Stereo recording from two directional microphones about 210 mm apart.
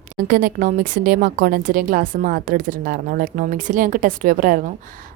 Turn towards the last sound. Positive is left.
turn(degrees=-40)  # may be behind; listen again after turning